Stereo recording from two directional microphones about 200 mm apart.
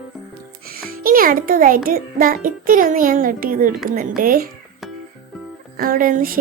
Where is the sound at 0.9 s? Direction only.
45° right (ahead or behind).